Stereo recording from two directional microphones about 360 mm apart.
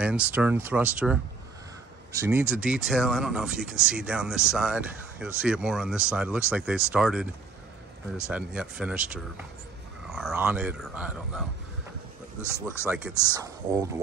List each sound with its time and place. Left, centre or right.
0.0 s speech: centre
8.3 s speech: centre
12.8 s speech: centre